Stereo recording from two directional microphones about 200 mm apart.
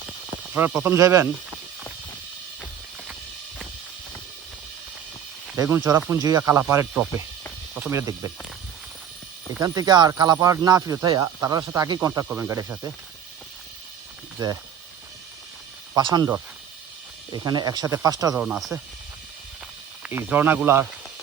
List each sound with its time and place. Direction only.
0.5 s speech: 10° right (ahead or behind)
5.5 s speech: 10° right (ahead or behind)
9.6 s speech: 20° right (ahead or behind)
14.3 s speech: 15° right (ahead or behind)
16.0 s speech: 20° right (ahead or behind)
18.4 s speech: 5° right (ahead or behind)
20.0 s speech: 10° right (ahead or behind)